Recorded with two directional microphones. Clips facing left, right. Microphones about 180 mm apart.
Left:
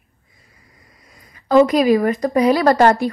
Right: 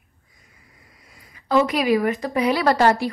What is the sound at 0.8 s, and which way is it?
A woman's voice, 35° left (ahead or behind).